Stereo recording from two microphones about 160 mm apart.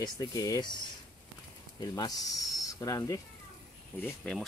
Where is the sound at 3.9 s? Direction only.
5° left (ahead or behind).